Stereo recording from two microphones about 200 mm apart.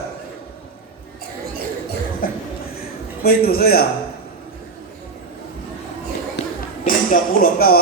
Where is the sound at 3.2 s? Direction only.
50° left (ahead or behind).